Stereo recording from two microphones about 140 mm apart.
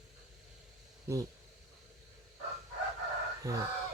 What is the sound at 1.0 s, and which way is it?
Speech, 25° right (ahead or behind).